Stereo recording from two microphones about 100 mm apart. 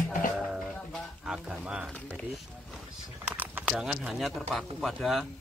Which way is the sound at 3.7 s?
5° right (ahead or behind).